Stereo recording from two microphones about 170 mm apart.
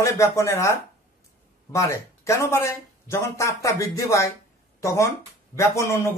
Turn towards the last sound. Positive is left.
turn(degrees=15)  # may be behind; listen again after turning